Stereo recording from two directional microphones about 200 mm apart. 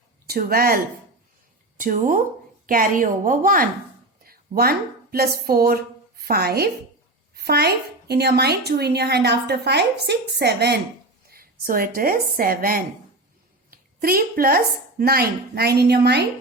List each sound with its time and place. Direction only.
0.3 s a woman's voice: 45° right (ahead or behind)
1.8 s a woman's voice: 40° right (ahead or behind)
4.2 s a sound: 50° right (ahead or behind)
5.1 s a woman's voice: 50° right (ahead or behind)